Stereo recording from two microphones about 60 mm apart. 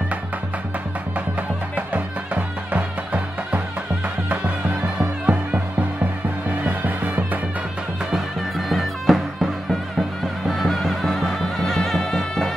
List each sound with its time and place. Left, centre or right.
1.8 s music: right
5.2 s music: centre
8.1 s music: centre
10.5 s music: centre